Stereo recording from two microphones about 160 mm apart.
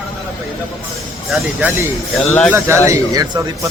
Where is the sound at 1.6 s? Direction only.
10° right (ahead or behind).